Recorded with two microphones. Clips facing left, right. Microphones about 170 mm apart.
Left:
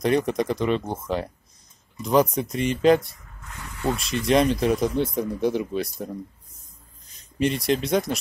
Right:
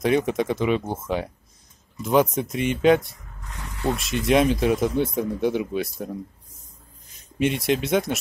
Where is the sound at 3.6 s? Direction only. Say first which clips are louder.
Right 1 dB; 15° right (ahead or behind).